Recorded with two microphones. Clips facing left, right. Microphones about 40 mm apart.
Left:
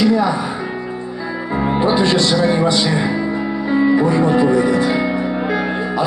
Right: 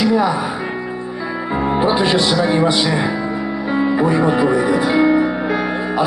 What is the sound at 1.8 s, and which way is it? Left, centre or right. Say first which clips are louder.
Speech: left 1 dB; centre.